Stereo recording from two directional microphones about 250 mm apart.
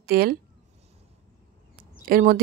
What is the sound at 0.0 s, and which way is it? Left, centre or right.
Speech, right.